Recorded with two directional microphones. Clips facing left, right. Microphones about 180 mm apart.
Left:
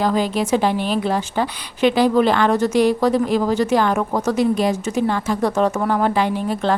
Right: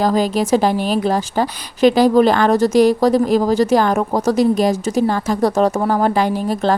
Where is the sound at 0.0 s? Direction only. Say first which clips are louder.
Right 3 dB; 40° right (ahead or behind).